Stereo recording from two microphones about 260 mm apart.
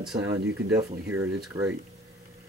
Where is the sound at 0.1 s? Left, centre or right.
Centre.